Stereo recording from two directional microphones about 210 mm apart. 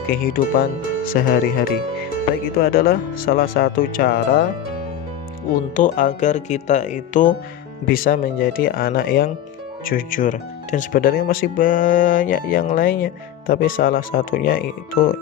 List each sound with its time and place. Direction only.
0.1 s speech: 45° left (ahead or behind)
5.7 s speech: 40° left (ahead or behind)